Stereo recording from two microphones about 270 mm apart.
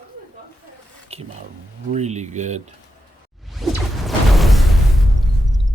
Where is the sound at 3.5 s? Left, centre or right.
Centre.